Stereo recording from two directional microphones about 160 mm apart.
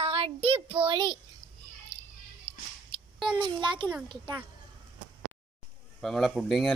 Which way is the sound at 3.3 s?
30° right (ahead or behind).